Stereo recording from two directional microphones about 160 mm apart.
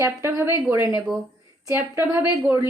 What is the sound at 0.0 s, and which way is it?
A woman's voice, 15° right (ahead or behind).